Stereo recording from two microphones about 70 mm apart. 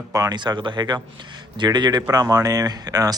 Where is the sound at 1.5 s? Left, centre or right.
Right.